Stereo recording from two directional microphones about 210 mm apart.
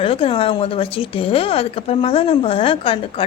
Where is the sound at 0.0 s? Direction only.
25° left (ahead or behind).